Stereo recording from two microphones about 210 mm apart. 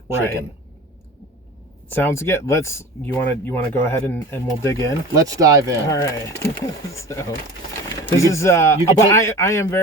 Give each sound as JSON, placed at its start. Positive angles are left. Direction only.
{"t": 1.9, "sound": "speech", "side_deg": 10}
{"t": 5.1, "sound": "speech", "side_deg": -15}
{"t": 5.9, "sound": "speech", "side_deg": 15}